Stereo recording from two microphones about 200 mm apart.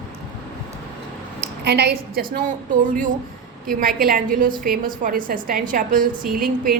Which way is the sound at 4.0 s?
45° right (ahead or behind).